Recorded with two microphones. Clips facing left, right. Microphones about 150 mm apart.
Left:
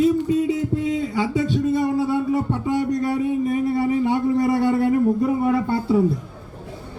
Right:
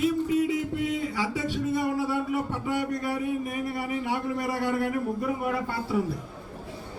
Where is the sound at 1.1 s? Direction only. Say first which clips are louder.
Left 8 dB; 25° left (ahead or behind).